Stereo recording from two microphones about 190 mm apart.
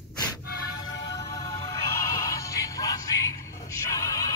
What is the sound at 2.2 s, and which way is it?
Music, 15° left (ahead or behind).